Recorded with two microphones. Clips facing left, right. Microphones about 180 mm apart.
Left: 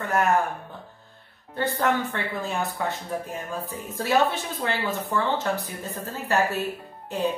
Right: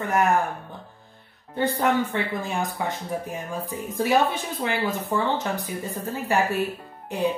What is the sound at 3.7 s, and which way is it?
A woman's voice, 15° right (ahead or behind).